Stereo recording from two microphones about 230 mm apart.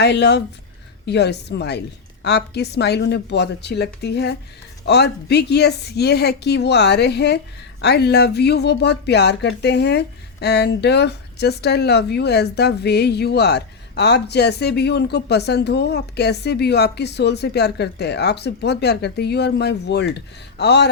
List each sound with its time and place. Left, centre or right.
0.0 s speech: left